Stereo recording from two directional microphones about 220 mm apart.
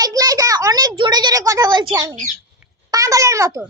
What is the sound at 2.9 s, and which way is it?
Babbling, 15° right (ahead or behind).